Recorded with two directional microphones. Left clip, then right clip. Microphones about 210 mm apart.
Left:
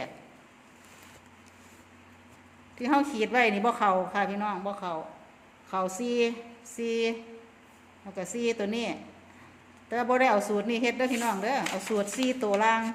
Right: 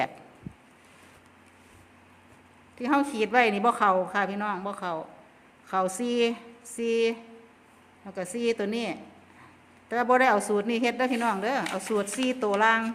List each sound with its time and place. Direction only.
2.7 s a woman's voice: 20° right (ahead or behind)